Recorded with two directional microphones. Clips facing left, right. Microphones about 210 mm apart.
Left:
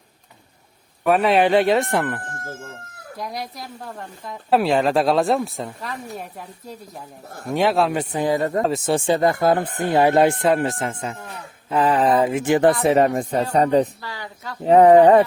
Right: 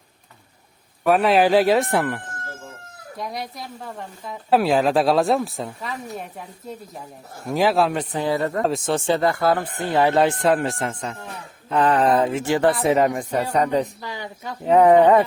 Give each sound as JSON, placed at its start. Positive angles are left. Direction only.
{"t": 1.0, "sound": "a woman's voice", "side_deg": 0}
{"t": 7.4, "sound": "a woman's voice", "side_deg": 0}
{"t": 8.1, "sound": "speech", "side_deg": 15}
{"t": 8.6, "sound": "a woman's voice", "side_deg": 0}
{"t": 9.0, "sound": "speech", "side_deg": 15}
{"t": 10.4, "sound": "a woman's voice", "side_deg": 0}
{"t": 12.8, "sound": "speech", "side_deg": 30}
{"t": 14.0, "sound": "speech", "side_deg": -20}
{"t": 14.7, "sound": "speech", "side_deg": 30}